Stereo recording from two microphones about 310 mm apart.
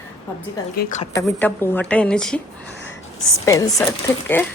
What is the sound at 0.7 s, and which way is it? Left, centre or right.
Speech, left.